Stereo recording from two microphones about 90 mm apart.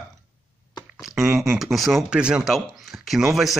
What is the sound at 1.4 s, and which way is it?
Speech, centre (ahead or behind).